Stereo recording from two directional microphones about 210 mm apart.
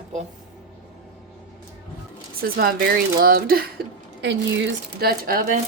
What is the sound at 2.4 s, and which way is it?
A woman's voice, 45° right (ahead or behind).